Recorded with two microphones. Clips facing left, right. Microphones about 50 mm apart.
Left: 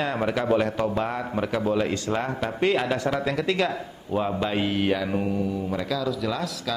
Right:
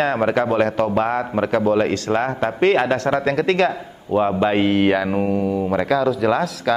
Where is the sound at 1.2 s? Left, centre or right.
Right.